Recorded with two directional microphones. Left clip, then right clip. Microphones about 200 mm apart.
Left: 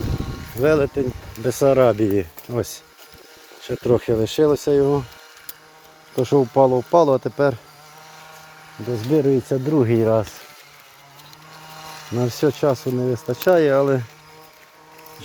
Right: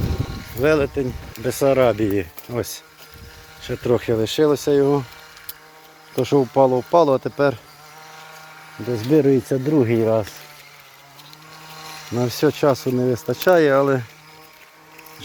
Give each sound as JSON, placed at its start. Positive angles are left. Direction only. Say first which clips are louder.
{"t": 0.5, "sound": "speech", "louder": "even", "side_deg": 15}
{"t": 4.8, "sound": "speech", "louder": "even", "side_deg": 0}
{"t": 6.1, "sound": "speech", "louder": "even", "side_deg": 5}
{"t": 9.0, "sound": "speech", "louder": "right 2 dB", "side_deg": -5}
{"t": 11.8, "sound": "mechanisms", "louder": "right 1 dB", "side_deg": 50}
{"t": 12.3, "sound": "speech", "louder": "right 2 dB", "side_deg": 5}